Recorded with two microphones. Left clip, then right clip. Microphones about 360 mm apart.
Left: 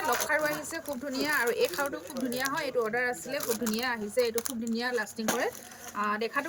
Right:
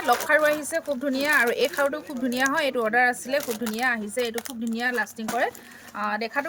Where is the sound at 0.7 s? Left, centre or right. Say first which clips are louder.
Right 9 dB; right.